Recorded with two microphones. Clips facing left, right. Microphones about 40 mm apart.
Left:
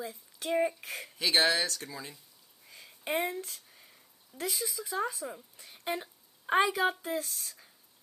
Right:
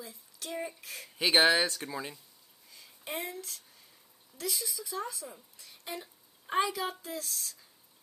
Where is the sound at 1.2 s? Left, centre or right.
Right.